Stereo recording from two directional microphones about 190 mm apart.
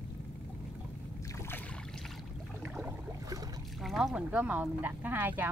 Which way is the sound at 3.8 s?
Centre (ahead or behind).